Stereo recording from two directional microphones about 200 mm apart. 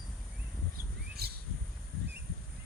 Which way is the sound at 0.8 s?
50° right (ahead or behind).